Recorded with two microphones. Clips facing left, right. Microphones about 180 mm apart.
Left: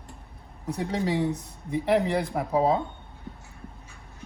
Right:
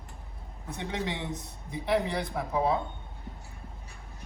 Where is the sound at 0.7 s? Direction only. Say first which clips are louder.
Left 7 dB; 35° left (ahead or behind).